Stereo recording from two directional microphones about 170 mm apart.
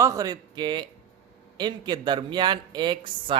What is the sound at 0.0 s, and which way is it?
A man's voice, 20° right (ahead or behind).